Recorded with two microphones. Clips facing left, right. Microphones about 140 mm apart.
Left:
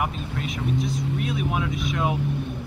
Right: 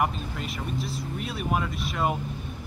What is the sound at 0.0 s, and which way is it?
Speech, centre (ahead or behind).